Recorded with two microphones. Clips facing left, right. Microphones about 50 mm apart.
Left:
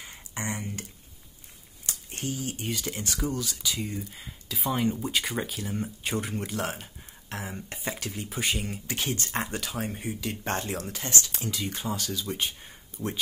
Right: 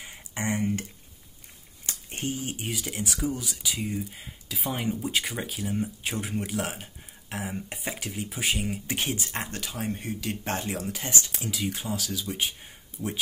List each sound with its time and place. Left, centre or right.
0.3 s a sound: right
2.2 s speech: right
2.5 s speech: centre
8.8 s speech: right
9.2 s speech: centre
11.1 s speech: right
11.3 s speech: centre